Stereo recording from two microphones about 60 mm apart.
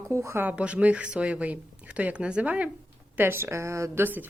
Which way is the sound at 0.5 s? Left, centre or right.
Centre.